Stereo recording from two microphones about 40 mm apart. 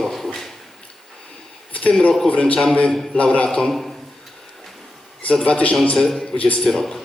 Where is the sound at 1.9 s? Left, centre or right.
Left.